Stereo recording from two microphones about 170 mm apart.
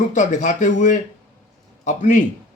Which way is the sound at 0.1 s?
45° left (ahead or behind).